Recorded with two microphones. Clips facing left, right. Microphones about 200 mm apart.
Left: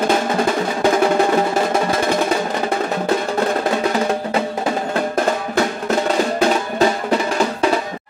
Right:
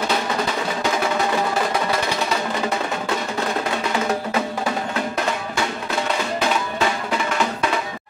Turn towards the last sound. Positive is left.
turn(degrees=40)  # may be behind; listen again after turning